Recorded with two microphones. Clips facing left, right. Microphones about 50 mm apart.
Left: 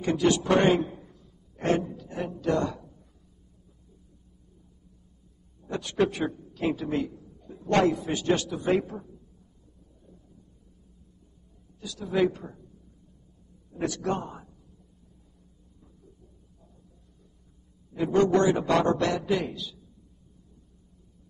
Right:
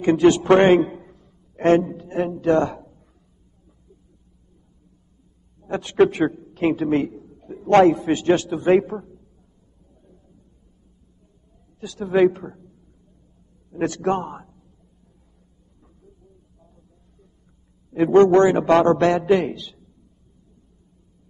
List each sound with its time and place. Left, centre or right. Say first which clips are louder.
0.0 s a man's voice: right 8 dB; right
5.7 s a man's voice: right 9 dB; right
11.8 s a man's voice: right 8 dB; right
13.7 s a man's voice: right 7 dB; right
17.9 s a man's voice: right 9 dB; right